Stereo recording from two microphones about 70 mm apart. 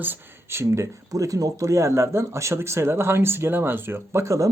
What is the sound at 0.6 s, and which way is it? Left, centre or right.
Speech, right.